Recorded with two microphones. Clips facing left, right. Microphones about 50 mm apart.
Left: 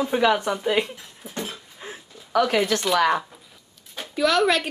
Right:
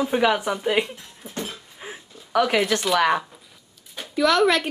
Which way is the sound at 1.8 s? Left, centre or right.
Centre.